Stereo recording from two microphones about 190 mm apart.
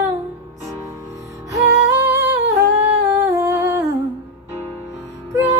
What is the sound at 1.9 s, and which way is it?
Humming, 15° right (ahead or behind).